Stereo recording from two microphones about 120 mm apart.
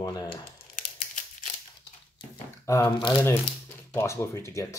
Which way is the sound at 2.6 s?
25° left (ahead or behind).